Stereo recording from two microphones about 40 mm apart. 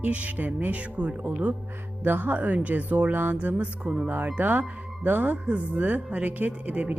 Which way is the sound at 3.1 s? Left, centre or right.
Right.